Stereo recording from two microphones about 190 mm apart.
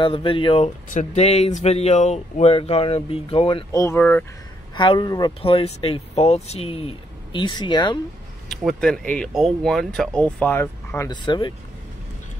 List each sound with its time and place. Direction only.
0.0 s speech: 25° left (ahead or behind)
0.8 s speech: 40° left (ahead or behind); by 4.3 s 10° left (ahead or behind)
4.7 s speech: 25° left (ahead or behind)
8.5 s speech: centre (ahead or behind)
11.1 s speech: 25° left (ahead or behind)